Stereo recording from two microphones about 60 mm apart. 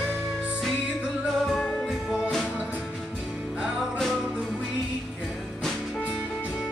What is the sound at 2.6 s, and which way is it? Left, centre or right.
Music, right.